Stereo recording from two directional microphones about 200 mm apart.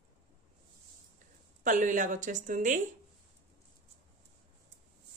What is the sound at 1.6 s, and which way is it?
A woman's voice, 40° right (ahead or behind).